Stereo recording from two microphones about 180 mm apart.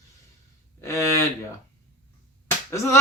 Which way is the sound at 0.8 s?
15° left (ahead or behind).